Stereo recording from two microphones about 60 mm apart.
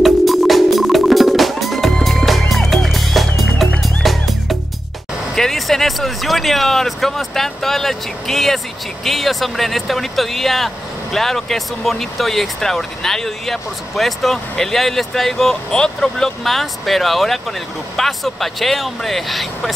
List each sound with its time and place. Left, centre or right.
0.0 s music: centre
5.3 s speech: centre